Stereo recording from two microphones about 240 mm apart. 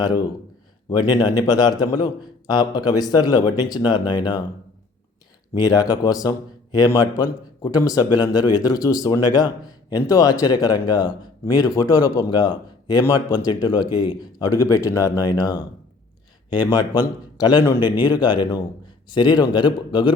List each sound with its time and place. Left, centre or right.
0.9 s speech: centre
5.5 s a man's voice: centre
17.7 s a man's voice: centre
18.1 s speech: centre